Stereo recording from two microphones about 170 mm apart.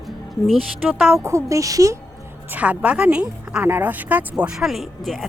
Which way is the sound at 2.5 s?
10° right (ahead or behind).